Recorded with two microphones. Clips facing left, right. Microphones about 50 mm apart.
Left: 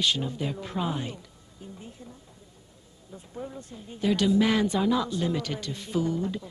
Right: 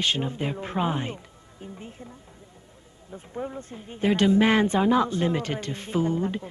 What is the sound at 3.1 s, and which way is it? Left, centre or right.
Speech, right.